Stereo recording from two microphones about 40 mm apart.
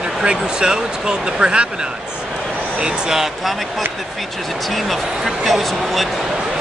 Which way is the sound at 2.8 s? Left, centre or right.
Right.